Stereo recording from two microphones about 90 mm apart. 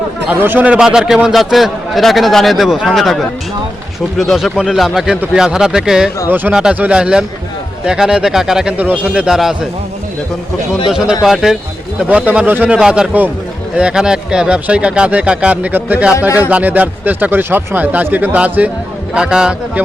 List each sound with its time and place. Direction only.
0.3 s a man's voice: 20° right (ahead or behind)
6.2 s speech: 20° right (ahead or behind)
6.5 s a man's voice: 10° right (ahead or behind)
10.8 s a man's voice: 5° right (ahead or behind)
12.0 s speech: 20° right (ahead or behind)